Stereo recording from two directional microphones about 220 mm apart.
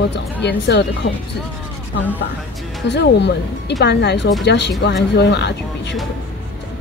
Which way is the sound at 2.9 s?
50° left (ahead or behind).